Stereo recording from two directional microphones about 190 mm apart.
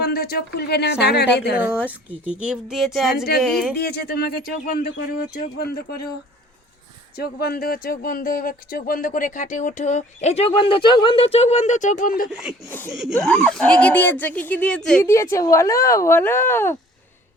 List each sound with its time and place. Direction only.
0.0 s a woman's voice: 55° left (ahead or behind)
1.6 s a woman's voice: 5° right (ahead or behind)
3.8 s speech: 55° left (ahead or behind)
7.2 s speech: 55° left (ahead or behind)
12.3 s a woman's voice: 5° right (ahead or behind); by 16.7 s 15° left (ahead or behind)